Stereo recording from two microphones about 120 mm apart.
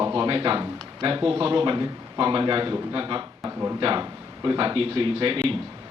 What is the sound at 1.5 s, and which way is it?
A man's voice, 40° right (ahead or behind).